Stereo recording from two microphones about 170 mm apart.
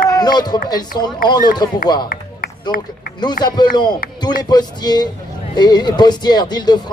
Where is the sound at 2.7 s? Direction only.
60° left (ahead or behind).